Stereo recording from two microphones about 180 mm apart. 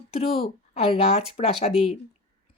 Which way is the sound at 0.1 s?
35° left (ahead or behind).